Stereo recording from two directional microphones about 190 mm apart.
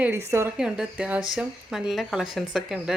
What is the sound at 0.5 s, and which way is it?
A woman's voice, 5° right (ahead or behind).